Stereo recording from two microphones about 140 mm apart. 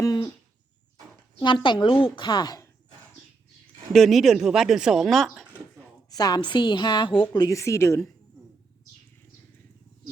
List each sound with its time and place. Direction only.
0.0 s bird: 25° left (ahead or behind)
1.4 s a woman's voice: 35° left (ahead or behind)
3.9 s speech: centre (ahead or behind)
6.1 s a woman's voice: 30° left (ahead or behind)
7.4 s speech: 20° left (ahead or behind)